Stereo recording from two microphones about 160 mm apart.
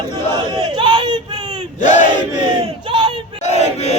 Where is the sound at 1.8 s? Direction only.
50° left (ahead or behind).